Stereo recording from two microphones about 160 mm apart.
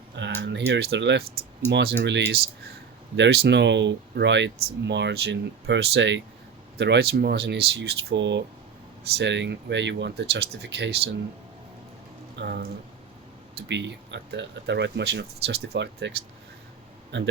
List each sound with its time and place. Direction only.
0.2 s speech: 90° right
3.2 s speech: 90° right
12.4 s speech: 90° right
17.1 s speech: 90° right